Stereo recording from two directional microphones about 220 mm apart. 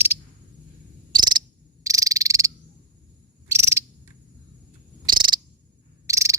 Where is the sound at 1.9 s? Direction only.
15° right (ahead or behind).